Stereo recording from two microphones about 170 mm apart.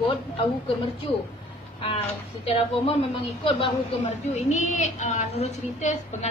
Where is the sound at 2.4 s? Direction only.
35° left (ahead or behind).